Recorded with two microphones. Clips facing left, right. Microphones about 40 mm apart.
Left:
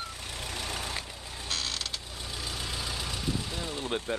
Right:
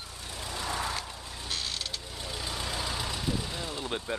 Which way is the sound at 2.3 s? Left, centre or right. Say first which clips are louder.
Right 2 dB; centre.